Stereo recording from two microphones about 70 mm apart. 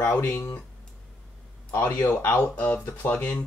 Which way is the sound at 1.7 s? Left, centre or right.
Left.